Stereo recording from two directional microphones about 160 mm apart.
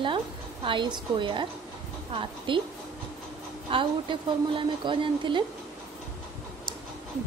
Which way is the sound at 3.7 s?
35° right (ahead or behind).